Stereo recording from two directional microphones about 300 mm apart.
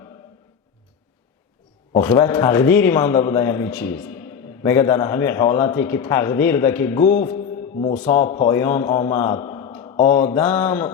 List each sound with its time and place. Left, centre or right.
2.0 s a man's voice: centre
7.3 s mantra: left
8.1 s a man's voice: centre